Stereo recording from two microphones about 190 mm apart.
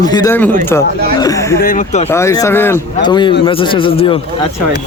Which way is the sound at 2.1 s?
15° left (ahead or behind).